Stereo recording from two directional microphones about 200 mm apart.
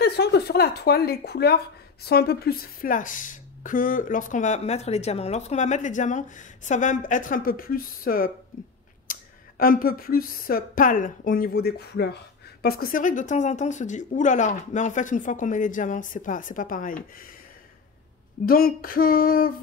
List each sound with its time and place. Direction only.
0.0 s a woman's voice: 55° left (ahead or behind)
18.4 s speech: 45° left (ahead or behind)